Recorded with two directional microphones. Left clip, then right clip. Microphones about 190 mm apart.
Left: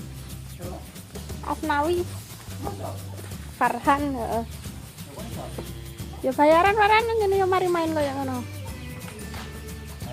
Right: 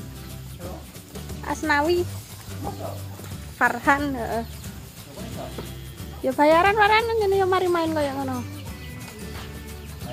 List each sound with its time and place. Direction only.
1.1 s music: 5° right (ahead or behind)
1.7 s speech: 15° right (ahead or behind)
3.5 s speech: 5° left (ahead or behind)
6.2 s speech: centre (ahead or behind)